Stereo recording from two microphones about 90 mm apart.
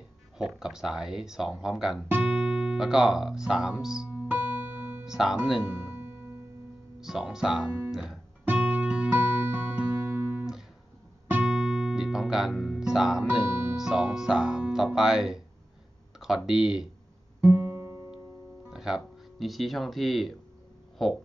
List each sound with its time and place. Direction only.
0.4 s speech: 5° right (ahead or behind)
4.3 s music: 20° right (ahead or behind)
5.0 s music: 5° right (ahead or behind)
7.0 s speech: 5° right (ahead or behind)
7.9 s music: 5° right (ahead or behind)
13.7 s speech: 5° right (ahead or behind)
16.4 s speech: 5° right (ahead or behind)
17.4 s guitar: 25° right (ahead or behind)
18.7 s speech: 5° right (ahead or behind)